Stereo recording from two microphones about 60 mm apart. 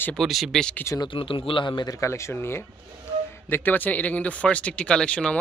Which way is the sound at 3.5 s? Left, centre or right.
Left.